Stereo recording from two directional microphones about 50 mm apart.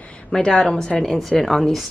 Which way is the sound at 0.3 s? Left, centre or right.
Centre.